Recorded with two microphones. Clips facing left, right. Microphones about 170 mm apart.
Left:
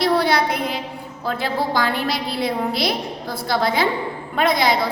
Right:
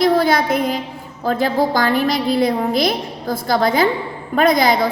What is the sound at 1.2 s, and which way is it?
A woman's voice, 45° right (ahead or behind).